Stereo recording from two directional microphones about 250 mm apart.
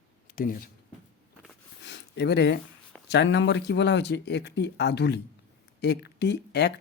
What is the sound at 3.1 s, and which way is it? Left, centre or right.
Speech, left.